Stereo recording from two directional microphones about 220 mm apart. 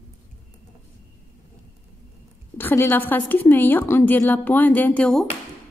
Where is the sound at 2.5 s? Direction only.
10° left (ahead or behind).